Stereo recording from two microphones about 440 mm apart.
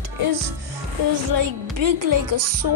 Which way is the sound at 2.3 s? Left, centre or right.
Right.